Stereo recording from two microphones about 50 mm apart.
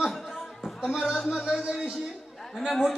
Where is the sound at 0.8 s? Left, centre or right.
Centre.